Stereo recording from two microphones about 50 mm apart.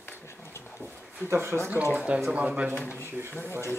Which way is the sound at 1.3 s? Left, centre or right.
Right.